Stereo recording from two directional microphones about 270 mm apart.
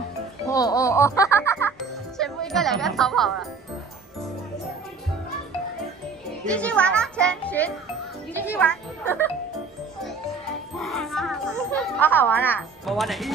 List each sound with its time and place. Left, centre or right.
0.5 s music: centre
6.4 s a child's voice: centre
10.8 s a child's voice: centre